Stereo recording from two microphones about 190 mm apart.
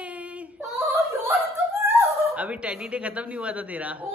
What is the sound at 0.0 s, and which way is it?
Female singing, 5° right (ahead or behind).